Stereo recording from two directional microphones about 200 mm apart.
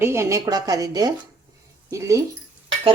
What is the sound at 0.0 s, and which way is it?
A woman's voice, 15° right (ahead or behind).